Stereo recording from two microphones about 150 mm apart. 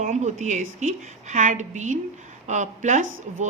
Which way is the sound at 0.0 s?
50° right (ahead or behind).